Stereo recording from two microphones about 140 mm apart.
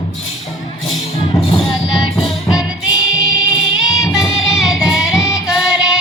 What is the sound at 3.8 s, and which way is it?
Music, 5° right (ahead or behind).